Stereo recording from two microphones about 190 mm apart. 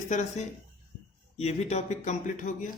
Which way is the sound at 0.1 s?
40° left (ahead or behind).